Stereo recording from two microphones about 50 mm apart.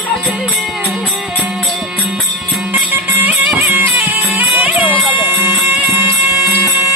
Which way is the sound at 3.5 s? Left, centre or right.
Right.